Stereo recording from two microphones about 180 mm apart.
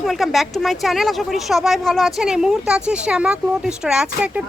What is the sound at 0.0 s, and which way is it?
Speech, centre (ahead or behind).